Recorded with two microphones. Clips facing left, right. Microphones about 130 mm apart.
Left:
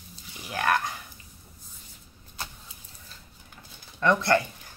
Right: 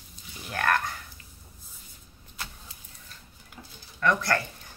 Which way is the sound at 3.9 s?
25° left (ahead or behind).